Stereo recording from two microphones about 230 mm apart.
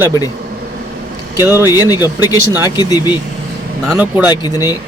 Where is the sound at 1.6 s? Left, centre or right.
Centre.